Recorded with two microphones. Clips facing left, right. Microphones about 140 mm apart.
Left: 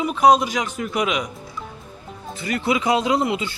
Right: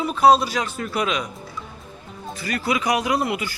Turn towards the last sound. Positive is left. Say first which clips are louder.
# left 2 dB
turn(degrees=25)  # may be behind; listen again after turning